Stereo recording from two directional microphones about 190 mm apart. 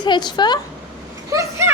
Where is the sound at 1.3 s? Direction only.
15° right (ahead or behind).